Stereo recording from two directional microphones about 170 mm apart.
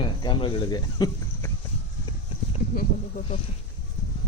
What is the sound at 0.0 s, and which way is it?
Speech, 30° left (ahead or behind).